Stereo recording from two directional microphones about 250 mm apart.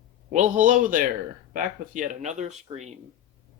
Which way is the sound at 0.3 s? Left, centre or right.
Right.